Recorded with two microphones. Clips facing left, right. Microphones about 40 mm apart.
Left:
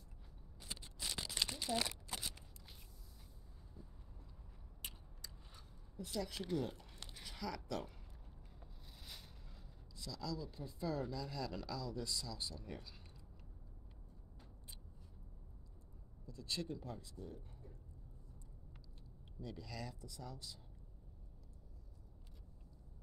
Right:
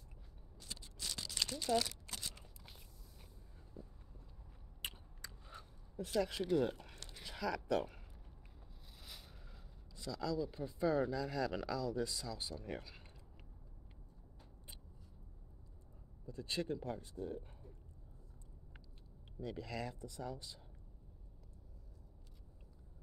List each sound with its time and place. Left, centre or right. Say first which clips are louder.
0.6 s a sound: left 1 dB; centre
4.8 s biting: right 6 dB; right
5.9 s speech: right 7 dB; right
7.2 s speech: right 7 dB; right
9.0 s a sound: right 1 dB; centre
9.9 s speech: right 6 dB; right
16.3 s speech: right 4 dB; right
19.4 s speech: right 5 dB; right